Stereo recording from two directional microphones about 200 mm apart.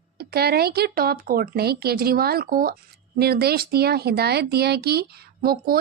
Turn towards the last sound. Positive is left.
turn(degrees=-50)  # may be behind; listen again after turning